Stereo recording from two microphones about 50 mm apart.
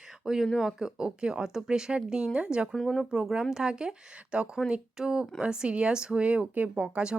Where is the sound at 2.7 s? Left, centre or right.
Centre.